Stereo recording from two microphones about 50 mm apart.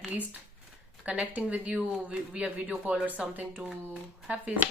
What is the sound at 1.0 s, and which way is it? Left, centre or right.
Speech, right.